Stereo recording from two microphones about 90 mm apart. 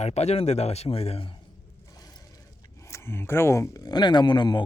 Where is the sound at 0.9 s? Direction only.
90° left.